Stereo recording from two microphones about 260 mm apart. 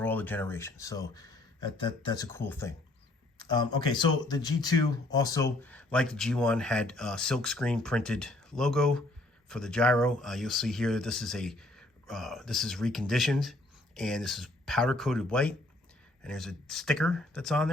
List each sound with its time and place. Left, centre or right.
0.0 s speech: centre